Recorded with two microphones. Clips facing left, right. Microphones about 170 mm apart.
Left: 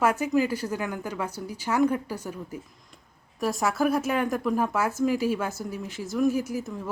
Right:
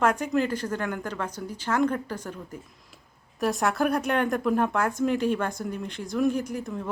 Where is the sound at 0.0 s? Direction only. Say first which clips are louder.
Left 1 dB; 5° left (ahead or behind).